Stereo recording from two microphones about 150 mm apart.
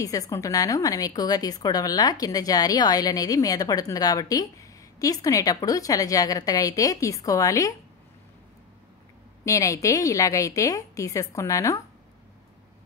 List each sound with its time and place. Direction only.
0.0 s a woman's voice: 25° left (ahead or behind)
9.4 s a woman's voice: 20° left (ahead or behind)